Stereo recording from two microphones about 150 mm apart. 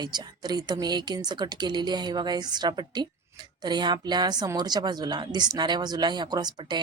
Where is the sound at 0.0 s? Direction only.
30° right (ahead or behind).